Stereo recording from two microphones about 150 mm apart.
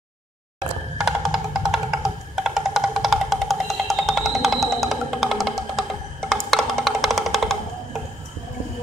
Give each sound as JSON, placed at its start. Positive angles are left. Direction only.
{"t": 0.9, "sound": "music", "side_deg": 0}